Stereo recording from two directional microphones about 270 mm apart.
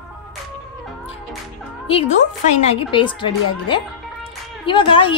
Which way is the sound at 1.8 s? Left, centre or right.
Left.